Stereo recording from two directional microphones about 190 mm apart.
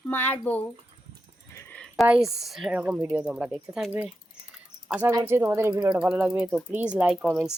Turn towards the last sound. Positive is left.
turn(degrees=0)  # may be behind; listen again after turning